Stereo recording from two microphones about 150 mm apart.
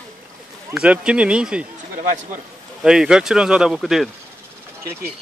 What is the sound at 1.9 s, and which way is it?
Speech, 60° right (ahead or behind).